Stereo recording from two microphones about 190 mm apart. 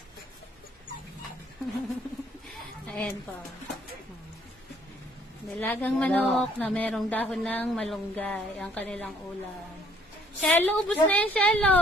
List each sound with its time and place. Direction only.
2.9 s a woman's voice: 5° left (ahead or behind)
5.5 s a woman's voice: 10° left (ahead or behind)
10.4 s a woman's voice: 10° left (ahead or behind)